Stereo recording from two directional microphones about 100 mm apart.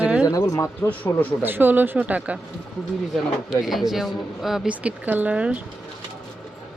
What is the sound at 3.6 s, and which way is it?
Speech, 5° right (ahead or behind).